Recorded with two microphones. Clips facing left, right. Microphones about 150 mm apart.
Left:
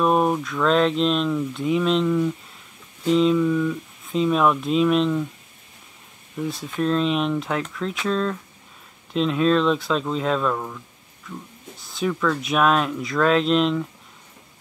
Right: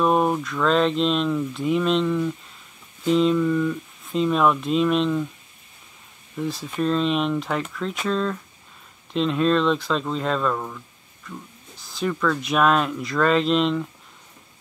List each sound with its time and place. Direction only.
0.0 s speech: centre (ahead or behind)
6.3 s speech: centre (ahead or behind)